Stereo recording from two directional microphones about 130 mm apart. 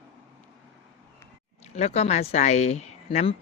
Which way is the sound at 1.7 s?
55° left (ahead or behind).